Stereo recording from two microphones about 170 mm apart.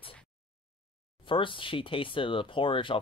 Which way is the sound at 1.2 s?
30° left (ahead or behind).